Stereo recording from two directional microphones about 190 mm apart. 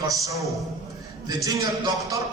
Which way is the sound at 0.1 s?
15° right (ahead or behind).